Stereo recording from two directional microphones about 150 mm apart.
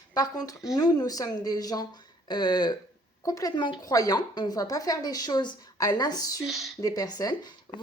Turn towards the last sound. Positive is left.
turn(degrees=25)  # may be behind; listen again after turning